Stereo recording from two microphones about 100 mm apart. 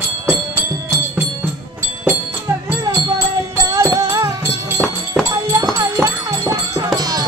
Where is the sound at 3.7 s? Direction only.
40° right (ahead or behind).